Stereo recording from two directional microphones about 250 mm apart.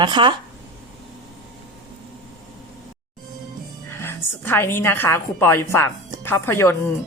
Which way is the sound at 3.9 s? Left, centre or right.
Centre.